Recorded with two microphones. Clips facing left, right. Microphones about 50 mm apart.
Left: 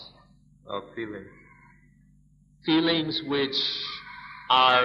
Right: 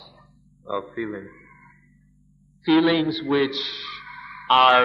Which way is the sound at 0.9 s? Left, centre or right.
Centre.